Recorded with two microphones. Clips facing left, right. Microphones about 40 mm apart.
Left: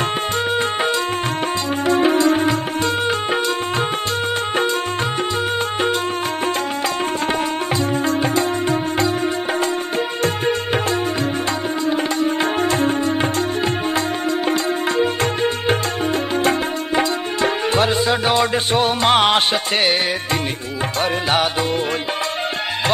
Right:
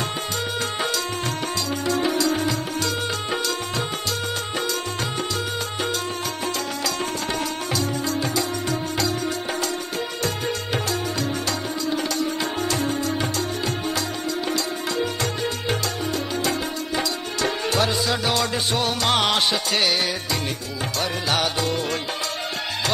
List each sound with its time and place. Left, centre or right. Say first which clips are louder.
1.9 s music: left 7 dB; left
7.7 s music: left 5 dB; left
10.2 s music: left 7 dB; left
14.5 s music: left 6 dB; left
21.0 s music: left 5 dB; left